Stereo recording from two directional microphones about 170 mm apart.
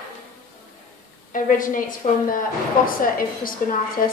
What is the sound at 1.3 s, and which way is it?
A woman's voice, 50° left (ahead or behind).